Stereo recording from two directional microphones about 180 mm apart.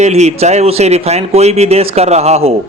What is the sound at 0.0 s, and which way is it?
A man's voice, 40° right (ahead or behind).